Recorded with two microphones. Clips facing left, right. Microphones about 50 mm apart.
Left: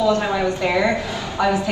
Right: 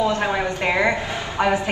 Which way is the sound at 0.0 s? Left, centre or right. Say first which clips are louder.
Left 2 dB; right.